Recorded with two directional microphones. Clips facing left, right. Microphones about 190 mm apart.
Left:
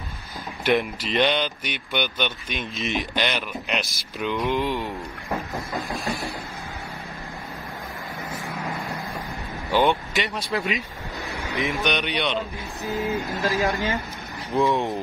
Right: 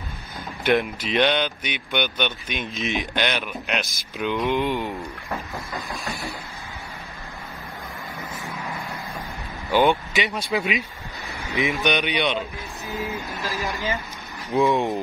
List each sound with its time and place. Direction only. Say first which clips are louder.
0.7 s speech: right 1 dB; centre (ahead or behind)
9.7 s speech: right 2 dB; centre (ahead or behind)
13.1 s speech: left 5 dB; 15° left (ahead or behind)
14.5 s speech: right 2 dB; centre (ahead or behind)